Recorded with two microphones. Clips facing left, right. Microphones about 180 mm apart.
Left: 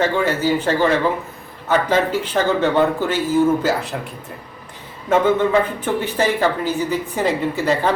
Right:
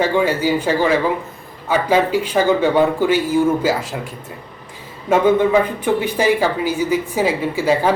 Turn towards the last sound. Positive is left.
turn(degrees=-10)  # may be behind; listen again after turning